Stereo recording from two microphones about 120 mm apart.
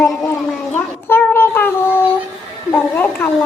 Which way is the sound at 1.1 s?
20° left (ahead or behind).